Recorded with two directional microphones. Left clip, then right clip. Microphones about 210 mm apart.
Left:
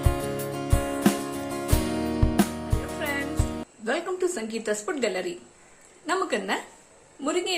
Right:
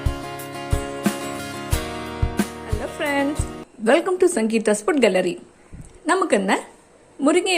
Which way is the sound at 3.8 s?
40° right (ahead or behind).